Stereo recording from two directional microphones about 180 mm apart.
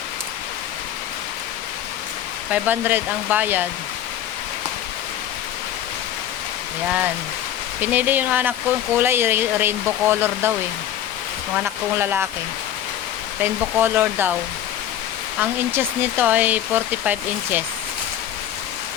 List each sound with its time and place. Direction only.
2.5 s speech: 10° right (ahead or behind)
7.8 s speech: 10° right (ahead or behind)
11.5 s speech: 10° right (ahead or behind)
13.4 s speech: 10° right (ahead or behind)
15.4 s speech: 10° right (ahead or behind)